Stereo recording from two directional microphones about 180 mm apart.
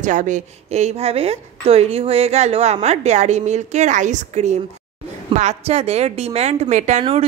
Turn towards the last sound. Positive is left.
turn(degrees=-35)  # may be behind; listen again after turning